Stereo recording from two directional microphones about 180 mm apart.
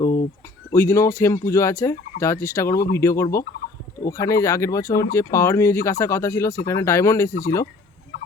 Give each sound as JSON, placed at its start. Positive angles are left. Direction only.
{"t": 0.7, "sound": "speech", "side_deg": 15}